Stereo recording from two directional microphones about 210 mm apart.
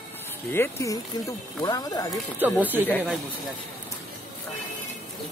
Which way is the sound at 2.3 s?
10° right (ahead or behind).